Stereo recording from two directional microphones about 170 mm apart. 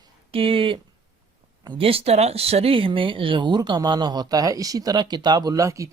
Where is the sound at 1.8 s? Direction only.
35° right (ahead or behind).